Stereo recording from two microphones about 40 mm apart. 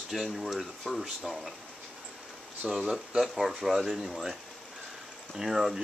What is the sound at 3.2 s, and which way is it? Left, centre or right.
Speech, centre.